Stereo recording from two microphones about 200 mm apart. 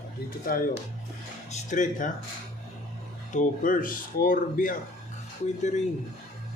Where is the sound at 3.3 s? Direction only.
40° left (ahead or behind).